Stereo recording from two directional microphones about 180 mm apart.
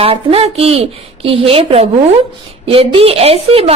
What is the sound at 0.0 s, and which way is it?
A woman's voice, 30° right (ahead or behind).